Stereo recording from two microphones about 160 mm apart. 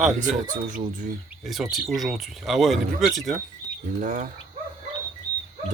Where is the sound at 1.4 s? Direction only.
Centre (ahead or behind).